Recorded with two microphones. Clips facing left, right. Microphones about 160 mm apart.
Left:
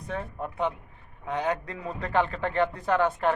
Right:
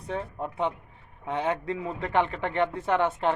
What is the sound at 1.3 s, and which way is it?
A man's voice, 25° right (ahead or behind).